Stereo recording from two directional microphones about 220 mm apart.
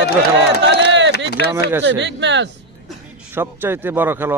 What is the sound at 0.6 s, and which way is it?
Crowd, 55° right (ahead or behind).